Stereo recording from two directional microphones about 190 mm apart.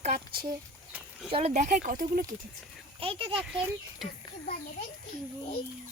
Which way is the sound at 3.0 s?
30° right (ahead or behind).